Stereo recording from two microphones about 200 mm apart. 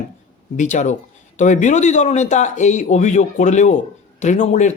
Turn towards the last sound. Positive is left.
turn(degrees=35)  # may be behind; listen again after turning